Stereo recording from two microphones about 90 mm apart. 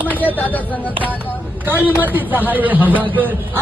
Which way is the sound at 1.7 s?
20° right (ahead or behind).